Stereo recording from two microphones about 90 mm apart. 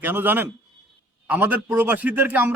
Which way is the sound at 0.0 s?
20° right (ahead or behind).